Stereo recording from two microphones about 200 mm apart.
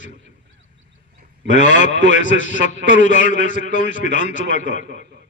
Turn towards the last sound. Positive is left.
turn(degrees=40)  # may be behind; listen again after turning